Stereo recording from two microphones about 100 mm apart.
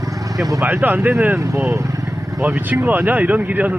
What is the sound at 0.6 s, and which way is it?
Speech, 20° right (ahead or behind).